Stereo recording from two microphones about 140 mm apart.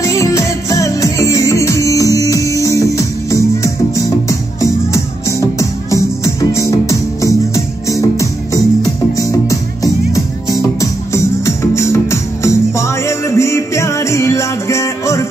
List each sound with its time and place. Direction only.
0.0 s music: 20° left (ahead or behind)
10.8 s music: 20° left (ahead or behind)